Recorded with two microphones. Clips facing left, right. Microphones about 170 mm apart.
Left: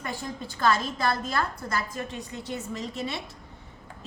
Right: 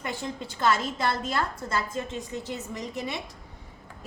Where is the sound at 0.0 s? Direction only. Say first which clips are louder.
Right 1 dB; 20° right (ahead or behind).